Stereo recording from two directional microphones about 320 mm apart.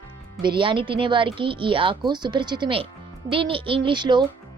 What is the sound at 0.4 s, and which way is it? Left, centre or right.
Speech, centre.